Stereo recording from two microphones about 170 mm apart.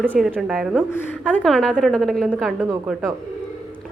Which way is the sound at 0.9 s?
10° left (ahead or behind).